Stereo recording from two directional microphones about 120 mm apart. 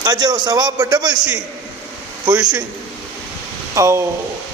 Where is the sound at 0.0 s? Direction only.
35° right (ahead or behind).